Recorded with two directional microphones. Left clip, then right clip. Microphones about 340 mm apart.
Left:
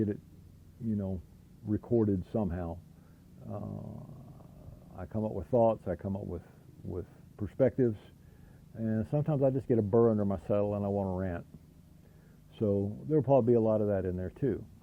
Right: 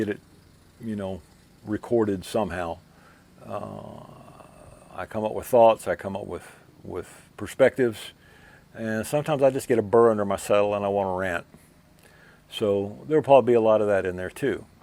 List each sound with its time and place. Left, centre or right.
0.9 s speech: centre
3.8 s a sound: centre
4.9 s speech: centre
12.5 s speech: centre